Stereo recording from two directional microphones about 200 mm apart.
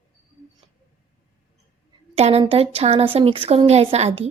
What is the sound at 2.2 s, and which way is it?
A woman's voice, 30° right (ahead or behind).